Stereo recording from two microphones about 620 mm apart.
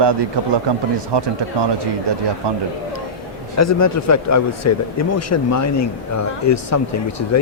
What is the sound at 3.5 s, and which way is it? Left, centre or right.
Speech, left.